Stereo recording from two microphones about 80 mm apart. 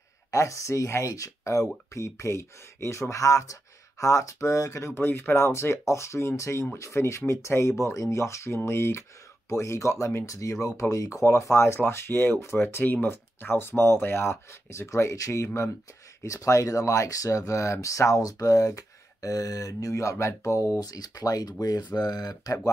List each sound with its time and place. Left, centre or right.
0.3 s speech: left
20.8 s speech: left